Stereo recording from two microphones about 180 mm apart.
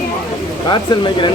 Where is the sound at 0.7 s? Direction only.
25° left (ahead or behind).